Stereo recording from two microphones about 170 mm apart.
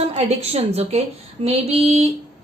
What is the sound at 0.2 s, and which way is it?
Speech, 40° right (ahead or behind).